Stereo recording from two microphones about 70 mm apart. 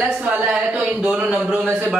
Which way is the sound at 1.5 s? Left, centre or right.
Right.